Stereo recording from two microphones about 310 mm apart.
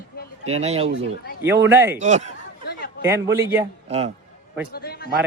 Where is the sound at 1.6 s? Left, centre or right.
Centre.